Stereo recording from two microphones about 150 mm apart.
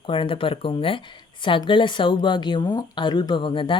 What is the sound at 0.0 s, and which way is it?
Speech, 35° left (ahead or behind).